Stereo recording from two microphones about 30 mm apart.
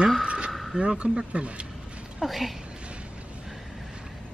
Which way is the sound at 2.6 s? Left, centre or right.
Right.